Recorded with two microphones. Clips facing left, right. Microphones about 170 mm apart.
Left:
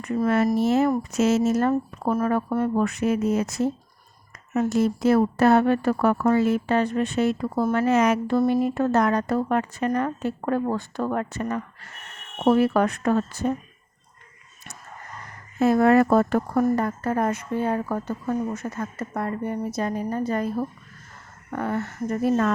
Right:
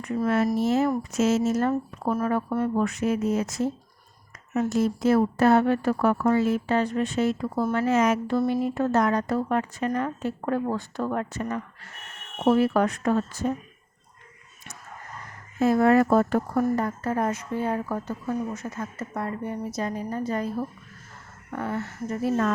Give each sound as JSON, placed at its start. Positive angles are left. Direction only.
{"t": 0.0, "sound": "speech", "side_deg": 60}
{"t": 2.0, "sound": "speech", "side_deg": 45}
{"t": 2.8, "sound": "speech", "side_deg": 65}
{"t": 8.4, "sound": "speech", "side_deg": 50}
{"t": 15.5, "sound": "speech", "side_deg": 65}
{"t": 21.6, "sound": "speech", "side_deg": 55}